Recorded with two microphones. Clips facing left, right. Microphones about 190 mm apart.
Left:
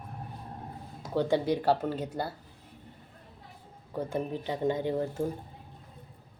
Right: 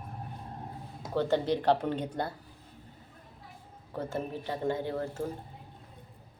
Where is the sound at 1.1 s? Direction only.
10° left (ahead or behind).